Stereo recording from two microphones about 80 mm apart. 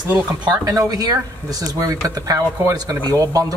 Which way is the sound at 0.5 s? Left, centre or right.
Right.